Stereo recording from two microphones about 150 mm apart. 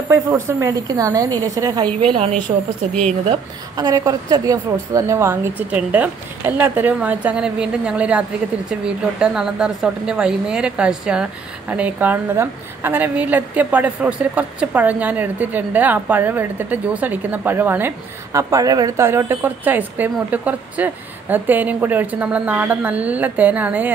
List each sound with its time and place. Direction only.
0.1 s a woman's voice: 15° right (ahead or behind)